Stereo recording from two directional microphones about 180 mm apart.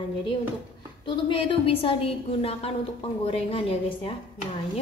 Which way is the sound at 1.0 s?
25° left (ahead or behind).